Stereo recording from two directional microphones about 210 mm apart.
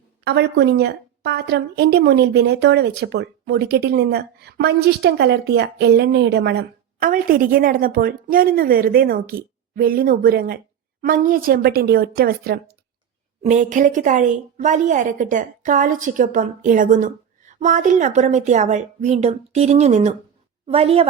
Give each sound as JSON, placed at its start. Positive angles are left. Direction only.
{"t": 0.3, "sound": "a woman's voice", "side_deg": -55}
{"t": 13.4, "sound": "a woman's voice", "side_deg": -35}